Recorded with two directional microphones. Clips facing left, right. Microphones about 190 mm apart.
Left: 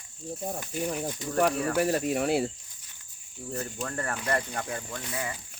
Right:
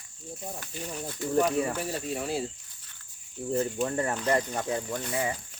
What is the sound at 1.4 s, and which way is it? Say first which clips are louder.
Speech: left 3 dB; 65° left (ahead or behind).